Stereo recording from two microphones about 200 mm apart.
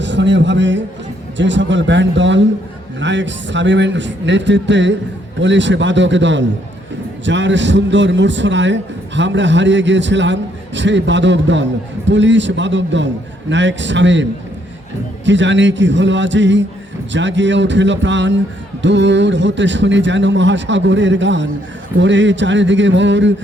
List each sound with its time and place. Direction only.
0.0 s a man's voice: 60° right (ahead or behind)
15.3 s a man's voice: 65° right (ahead or behind)